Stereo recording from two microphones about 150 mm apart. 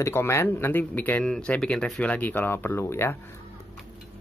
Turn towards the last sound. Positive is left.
turn(degrees=15)  # may be behind; listen again after turning